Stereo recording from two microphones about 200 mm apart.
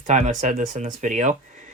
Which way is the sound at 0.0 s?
40° right (ahead or behind).